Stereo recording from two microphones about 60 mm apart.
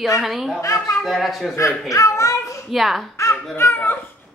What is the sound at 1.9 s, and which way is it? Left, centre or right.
Speech, left.